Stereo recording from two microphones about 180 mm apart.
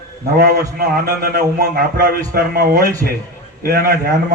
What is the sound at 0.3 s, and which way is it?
A man's voice, 65° right (ahead or behind).